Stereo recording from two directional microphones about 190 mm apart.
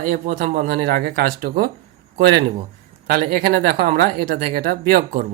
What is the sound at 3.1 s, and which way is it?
Speech, 45° right (ahead or behind).